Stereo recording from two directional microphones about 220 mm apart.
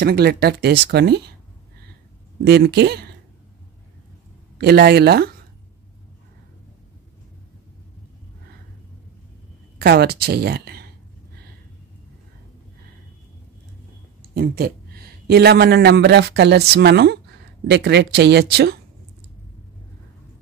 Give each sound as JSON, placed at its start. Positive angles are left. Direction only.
{"t": 0.0, "sound": "speech", "side_deg": -45}
{"t": 2.4, "sound": "speech", "side_deg": -50}
{"t": 4.6, "sound": "speech", "side_deg": -45}
{"t": 9.8, "sound": "speech", "side_deg": -45}
{"t": 14.2, "sound": "a man's voice", "side_deg": -40}